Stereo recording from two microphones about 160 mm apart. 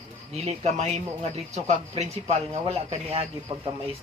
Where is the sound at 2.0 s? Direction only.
40° right (ahead or behind).